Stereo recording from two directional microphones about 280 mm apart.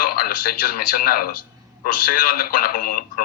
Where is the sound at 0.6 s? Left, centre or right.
Left.